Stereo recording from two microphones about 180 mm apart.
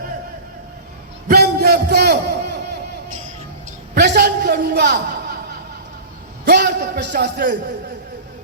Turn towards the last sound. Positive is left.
turn(degrees=-55)  # may be behind; listen again after turning